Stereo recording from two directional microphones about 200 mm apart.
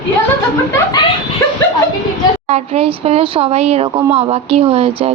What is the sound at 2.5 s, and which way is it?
Speech, 30° right (ahead or behind).